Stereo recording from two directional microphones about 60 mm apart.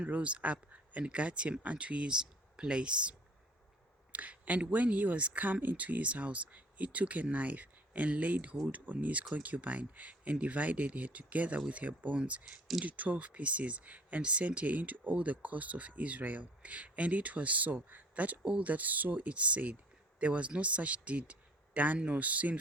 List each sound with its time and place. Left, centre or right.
0.0 s speech: right